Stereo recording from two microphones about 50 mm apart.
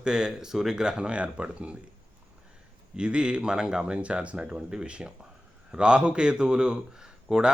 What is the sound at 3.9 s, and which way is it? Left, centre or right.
A man's voice, right.